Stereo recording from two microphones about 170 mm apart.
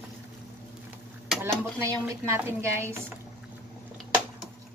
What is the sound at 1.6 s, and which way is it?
A woman's voice, 15° right (ahead or behind).